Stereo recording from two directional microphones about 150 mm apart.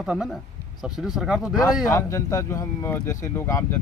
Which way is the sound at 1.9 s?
20° left (ahead or behind).